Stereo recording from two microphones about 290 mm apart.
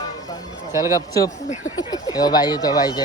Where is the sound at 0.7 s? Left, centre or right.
Centre.